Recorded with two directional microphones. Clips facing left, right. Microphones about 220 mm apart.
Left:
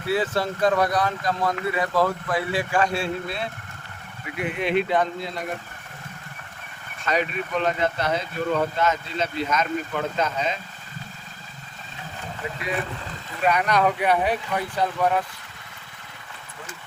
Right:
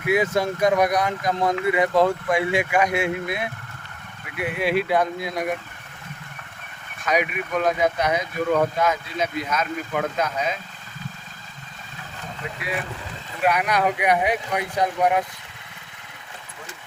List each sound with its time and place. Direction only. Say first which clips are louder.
0.0 s speech: right 3 dB; 15° right (ahead or behind)
7.1 s speech: right 2 dB; 10° right (ahead or behind)
13.4 s speech: even; 10° right (ahead or behind)